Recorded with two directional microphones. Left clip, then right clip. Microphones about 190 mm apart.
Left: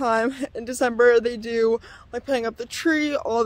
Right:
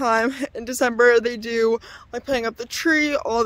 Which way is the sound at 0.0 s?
20° right (ahead or behind).